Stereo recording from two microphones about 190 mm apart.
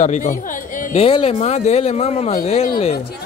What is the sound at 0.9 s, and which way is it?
A man's voice, 30° left (ahead or behind).